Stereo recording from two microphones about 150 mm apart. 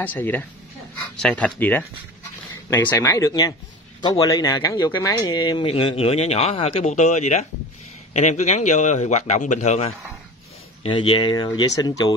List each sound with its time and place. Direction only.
0.0 s a man's voice: 10° left (ahead or behind); by 9.9 s 45° left (ahead or behind)
10.8 s speech: 35° left (ahead or behind)